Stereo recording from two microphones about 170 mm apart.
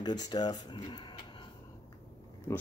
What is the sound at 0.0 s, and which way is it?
Speech, 25° left (ahead or behind).